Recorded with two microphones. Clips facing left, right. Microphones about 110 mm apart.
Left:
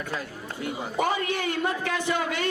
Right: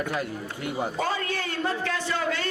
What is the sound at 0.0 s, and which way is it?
Speech, 55° right (ahead or behind).